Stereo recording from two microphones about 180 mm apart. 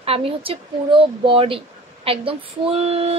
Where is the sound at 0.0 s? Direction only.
30° right (ahead or behind).